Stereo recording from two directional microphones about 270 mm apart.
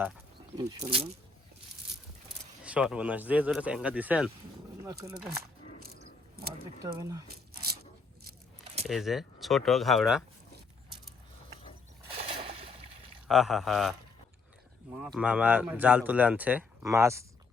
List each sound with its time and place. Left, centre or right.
0.5 s speech: centre
2.6 s speech: centre
6.0 s a sound: right
6.8 s speech: centre
8.9 s speech: centre
12.1 s a sound: right
13.2 s speech: centre
15.0 s speech: centre